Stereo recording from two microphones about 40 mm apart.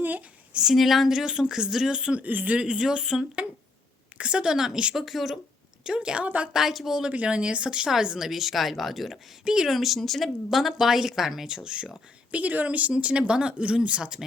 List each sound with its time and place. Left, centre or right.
0.7 s speech: centre
1.1 s speech: centre
2.1 s speech: right
2.6 s speech: right; by 5.4 s centre
5.8 s speech: centre
6.5 s speech: centre
7.1 s speech: right
8.3 s speech: centre
9.4 s speech: centre
9.6 s speech: centre
12.3 s speech: right